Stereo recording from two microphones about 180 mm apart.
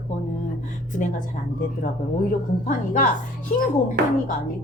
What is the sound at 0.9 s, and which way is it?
Speech, 45° left (ahead or behind).